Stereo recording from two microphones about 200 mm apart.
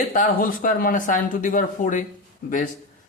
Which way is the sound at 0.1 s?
40° left (ahead or behind).